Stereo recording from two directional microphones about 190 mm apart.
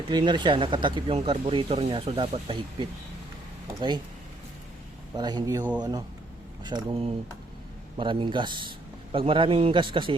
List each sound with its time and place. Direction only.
0.1 s speech: 25° right (ahead or behind)
3.8 s speech: 20° right (ahead or behind)
5.1 s speech: 20° right (ahead or behind)
6.7 s speech: 25° right (ahead or behind)